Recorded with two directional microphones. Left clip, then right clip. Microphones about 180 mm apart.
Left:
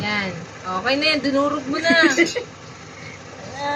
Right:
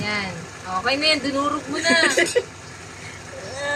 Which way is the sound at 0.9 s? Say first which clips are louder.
Left 1 dB; 20° left (ahead or behind).